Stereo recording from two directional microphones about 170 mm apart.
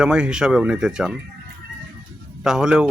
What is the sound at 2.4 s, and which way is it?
Speech, 5° right (ahead or behind).